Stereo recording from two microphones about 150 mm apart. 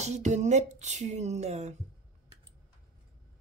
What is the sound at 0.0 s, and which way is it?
Speech, 50° right (ahead or behind).